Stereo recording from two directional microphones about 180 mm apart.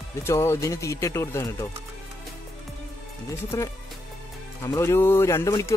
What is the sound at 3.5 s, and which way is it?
Speech, 15° left (ahead or behind).